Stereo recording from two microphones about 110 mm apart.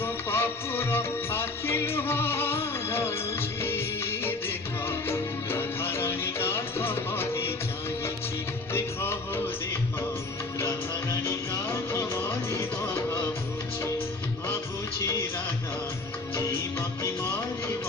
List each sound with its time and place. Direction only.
0.0 s music: 20° left (ahead or behind)
8.7 s music: 20° left (ahead or behind)
10.6 s music: 25° left (ahead or behind)